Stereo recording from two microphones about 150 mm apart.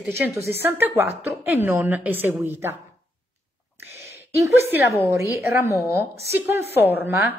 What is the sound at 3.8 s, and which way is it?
A woman's voice, 20° right (ahead or behind).